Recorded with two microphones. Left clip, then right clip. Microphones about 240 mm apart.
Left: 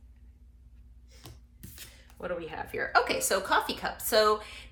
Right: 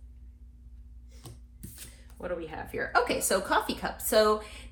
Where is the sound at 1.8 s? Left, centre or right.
Left.